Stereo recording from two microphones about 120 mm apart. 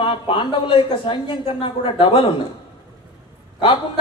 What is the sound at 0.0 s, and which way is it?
A man's voice, 45° left (ahead or behind).